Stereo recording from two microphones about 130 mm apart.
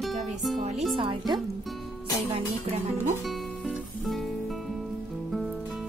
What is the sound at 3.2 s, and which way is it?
Music, centre (ahead or behind).